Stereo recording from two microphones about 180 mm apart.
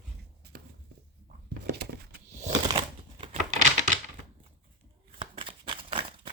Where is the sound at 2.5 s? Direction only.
30° right (ahead or behind).